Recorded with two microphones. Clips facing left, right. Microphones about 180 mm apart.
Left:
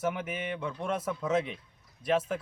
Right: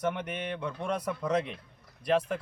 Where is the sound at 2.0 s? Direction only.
25° left (ahead or behind).